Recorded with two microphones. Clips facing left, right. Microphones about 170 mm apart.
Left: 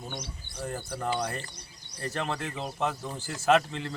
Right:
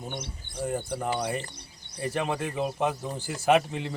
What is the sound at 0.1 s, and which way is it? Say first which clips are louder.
Speech: right 2 dB; 25° right (ahead or behind).